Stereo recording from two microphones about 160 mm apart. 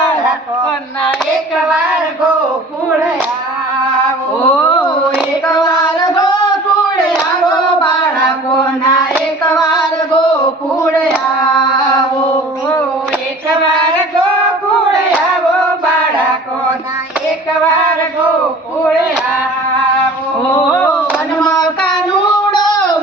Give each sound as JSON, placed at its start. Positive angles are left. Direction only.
{"t": 4.4, "sound": "a sound", "side_deg": 15}
{"t": 5.5, "sound": "female singing", "side_deg": 20}
{"t": 21.4, "sound": "child singing", "side_deg": 25}